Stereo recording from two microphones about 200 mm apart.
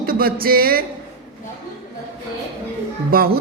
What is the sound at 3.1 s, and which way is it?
Speech, 50° right (ahead or behind).